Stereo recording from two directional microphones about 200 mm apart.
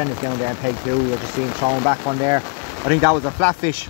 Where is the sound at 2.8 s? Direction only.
15° right (ahead or behind).